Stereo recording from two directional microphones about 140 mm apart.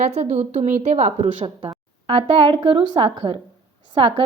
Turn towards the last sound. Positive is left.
turn(degrees=-40)  # may be behind; listen again after turning